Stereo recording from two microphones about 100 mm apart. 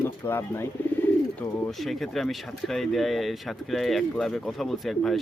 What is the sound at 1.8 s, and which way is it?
Speech, centre (ahead or behind).